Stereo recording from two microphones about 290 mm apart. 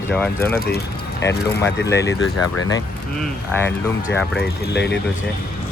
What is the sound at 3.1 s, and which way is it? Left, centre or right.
Speech, centre.